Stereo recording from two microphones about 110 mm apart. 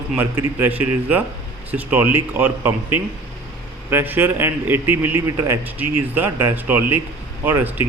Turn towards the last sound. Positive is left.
turn(degrees=-15)  # may be behind; listen again after turning